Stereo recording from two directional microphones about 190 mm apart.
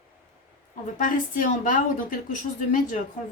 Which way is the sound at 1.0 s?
45° left (ahead or behind).